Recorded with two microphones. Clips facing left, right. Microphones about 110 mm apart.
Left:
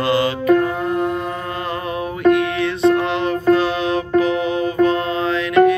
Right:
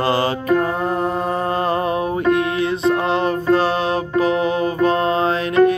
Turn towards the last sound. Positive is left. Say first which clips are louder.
# right 2 dB
turn(degrees=-35)  # may be behind; listen again after turning